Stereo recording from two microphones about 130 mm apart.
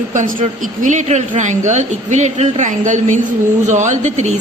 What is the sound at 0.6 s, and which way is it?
A woman's voice, 75° right (ahead or behind).